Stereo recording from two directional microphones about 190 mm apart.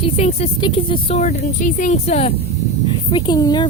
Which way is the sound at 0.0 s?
35° left (ahead or behind).